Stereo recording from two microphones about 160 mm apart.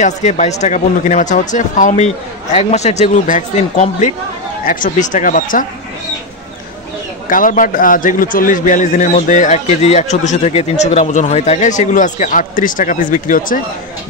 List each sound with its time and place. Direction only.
0.0 s a man's voice: 45° left (ahead or behind)
7.2 s a man's voice: 55° left (ahead or behind)